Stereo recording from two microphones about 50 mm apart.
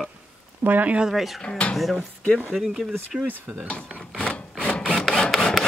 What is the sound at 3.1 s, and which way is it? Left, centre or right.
Speech, centre.